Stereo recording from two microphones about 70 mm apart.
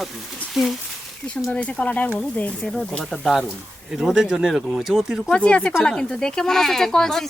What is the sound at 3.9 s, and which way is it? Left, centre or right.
Speech, centre.